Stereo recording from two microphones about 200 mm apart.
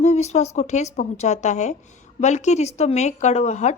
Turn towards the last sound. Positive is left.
turn(degrees=35)  # may be behind; listen again after turning